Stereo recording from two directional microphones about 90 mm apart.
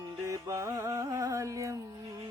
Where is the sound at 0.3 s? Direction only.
35° right (ahead or behind).